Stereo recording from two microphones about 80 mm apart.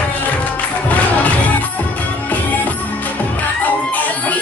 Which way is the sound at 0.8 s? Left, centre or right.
Centre.